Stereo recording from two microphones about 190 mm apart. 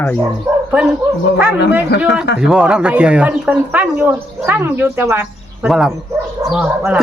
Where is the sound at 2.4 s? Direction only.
5° right (ahead or behind).